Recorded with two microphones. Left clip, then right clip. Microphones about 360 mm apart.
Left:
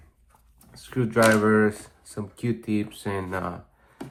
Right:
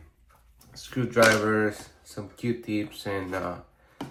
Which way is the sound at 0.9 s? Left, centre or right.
Centre.